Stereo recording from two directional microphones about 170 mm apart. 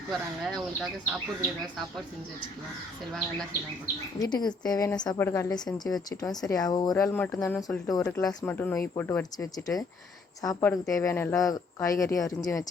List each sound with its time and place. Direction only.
0.1 s speech: centre (ahead or behind)
4.2 s speech: 25° left (ahead or behind)
8.4 s speech: 10° left (ahead or behind)